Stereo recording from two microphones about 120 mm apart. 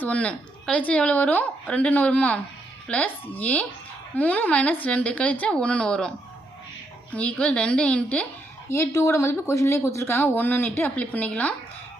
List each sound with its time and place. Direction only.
0.0 s a woman's voice: 10° left (ahead or behind)
7.1 s a woman's voice: 10° left (ahead or behind)
8.7 s speech: 25° left (ahead or behind)